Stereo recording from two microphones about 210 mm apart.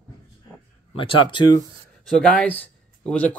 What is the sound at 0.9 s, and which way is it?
Speech, 25° left (ahead or behind).